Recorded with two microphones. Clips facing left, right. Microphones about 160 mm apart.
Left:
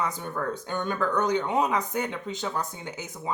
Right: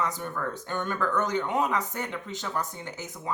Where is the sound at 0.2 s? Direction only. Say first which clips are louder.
Left 2 dB; 20° left (ahead or behind).